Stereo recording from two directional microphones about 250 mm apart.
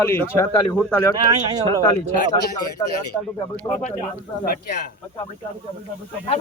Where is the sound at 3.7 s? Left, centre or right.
Left.